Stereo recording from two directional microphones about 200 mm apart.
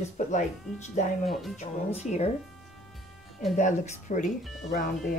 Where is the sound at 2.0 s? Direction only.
35° left (ahead or behind).